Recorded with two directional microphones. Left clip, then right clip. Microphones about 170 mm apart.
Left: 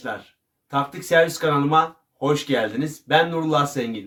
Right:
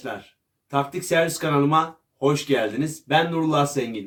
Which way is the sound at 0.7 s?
20° left (ahead or behind).